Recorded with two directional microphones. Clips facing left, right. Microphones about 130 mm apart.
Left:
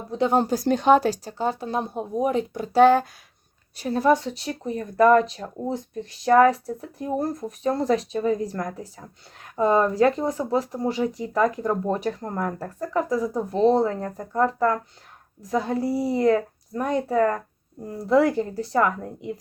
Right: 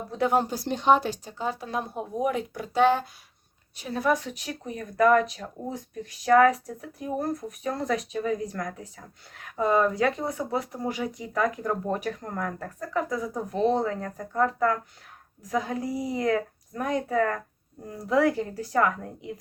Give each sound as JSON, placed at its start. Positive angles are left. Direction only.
{"t": 0.1, "sound": "speech", "side_deg": 25}
{"t": 0.4, "sound": "speech", "side_deg": 45}
{"t": 2.7, "sound": "speech", "side_deg": 45}
{"t": 3.8, "sound": "speech", "side_deg": 30}